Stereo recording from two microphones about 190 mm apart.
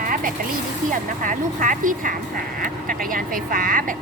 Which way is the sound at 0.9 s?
45° right (ahead or behind).